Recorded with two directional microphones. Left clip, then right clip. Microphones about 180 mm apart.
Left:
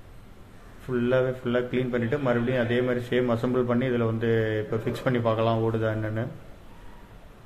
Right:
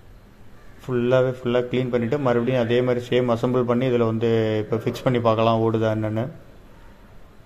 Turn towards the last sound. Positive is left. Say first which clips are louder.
# right 5 dB
turn(degrees=-30)  # may be behind; listen again after turning